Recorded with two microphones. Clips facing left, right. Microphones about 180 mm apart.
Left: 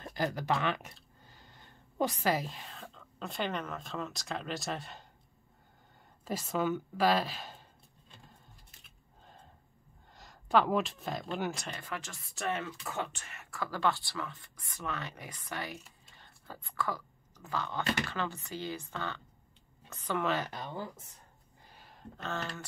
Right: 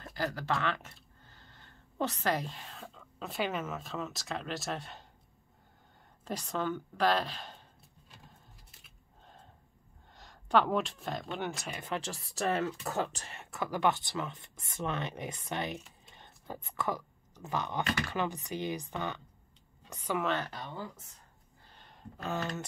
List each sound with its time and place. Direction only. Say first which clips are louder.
0.0 s speech: left 2 dB; 20° left (ahead or behind); by 5.0 s centre (ahead or behind)
6.2 s speech: left 2 dB; 5° left (ahead or behind)
8.1 s a sound: even; 5° right (ahead or behind)
10.1 s speech: even; centre (ahead or behind)
11.7 s a woman's voice: right 4 dB; 25° right (ahead or behind)
21.6 s a sound: left 1 dB; 5° left (ahead or behind)
22.1 s a woman's voice: right 3 dB; 10° right (ahead or behind)